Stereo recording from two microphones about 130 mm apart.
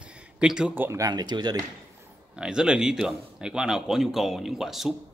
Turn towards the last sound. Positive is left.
turn(degrees=0)  # may be behind; listen again after turning